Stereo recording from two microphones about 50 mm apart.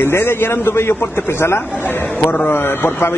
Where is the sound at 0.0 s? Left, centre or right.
Left.